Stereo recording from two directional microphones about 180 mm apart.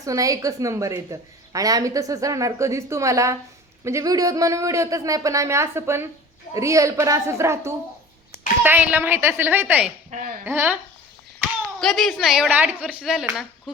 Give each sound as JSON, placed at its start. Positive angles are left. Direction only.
{"t": 0.0, "sound": "a woman's voice", "side_deg": -20}
{"t": 11.8, "sound": "speech", "side_deg": 0}